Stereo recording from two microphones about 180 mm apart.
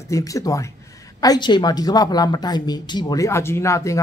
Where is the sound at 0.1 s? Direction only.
20° left (ahead or behind).